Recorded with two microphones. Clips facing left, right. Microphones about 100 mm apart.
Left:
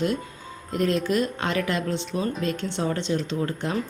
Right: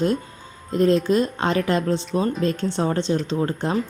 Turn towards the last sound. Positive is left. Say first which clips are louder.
# right 4 dB
turn(degrees=-35)  # may be behind; listen again after turning